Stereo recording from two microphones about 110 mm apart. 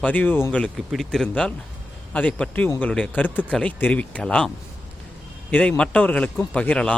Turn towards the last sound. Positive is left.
turn(degrees=10)  # may be behind; listen again after turning